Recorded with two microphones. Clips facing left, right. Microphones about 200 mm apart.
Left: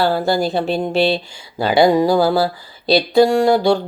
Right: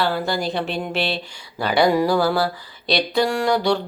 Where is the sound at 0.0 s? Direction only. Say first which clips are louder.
Left 5 dB; 35° left (ahead or behind).